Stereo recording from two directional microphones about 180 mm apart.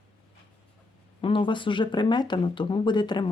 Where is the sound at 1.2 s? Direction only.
30° left (ahead or behind).